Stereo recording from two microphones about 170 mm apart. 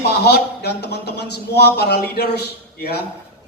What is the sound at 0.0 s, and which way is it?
A man's voice, 75° left (ahead or behind).